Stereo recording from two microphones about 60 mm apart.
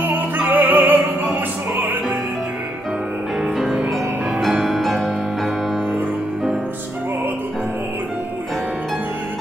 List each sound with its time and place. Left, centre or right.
0.0 s music: right
3.5 s music: centre